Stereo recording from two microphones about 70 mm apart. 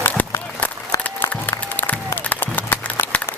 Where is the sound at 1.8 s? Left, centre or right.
Left.